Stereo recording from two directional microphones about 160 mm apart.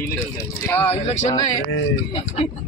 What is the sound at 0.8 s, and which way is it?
Speech, 45° left (ahead or behind).